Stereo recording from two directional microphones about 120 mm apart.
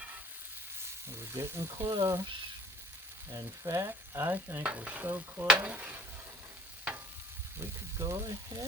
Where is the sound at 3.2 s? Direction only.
25° right (ahead or behind).